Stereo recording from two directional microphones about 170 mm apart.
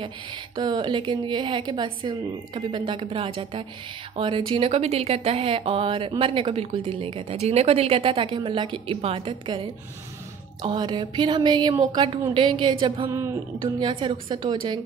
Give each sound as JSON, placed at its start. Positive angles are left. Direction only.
{"t": 0.6, "sound": "a woman's voice", "side_deg": -25}